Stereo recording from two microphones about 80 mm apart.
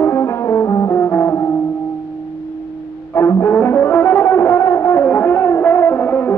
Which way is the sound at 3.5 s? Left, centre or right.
Left.